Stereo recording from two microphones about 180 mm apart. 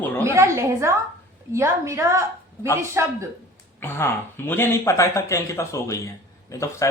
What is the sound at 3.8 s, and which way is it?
Speech, 10° left (ahead or behind).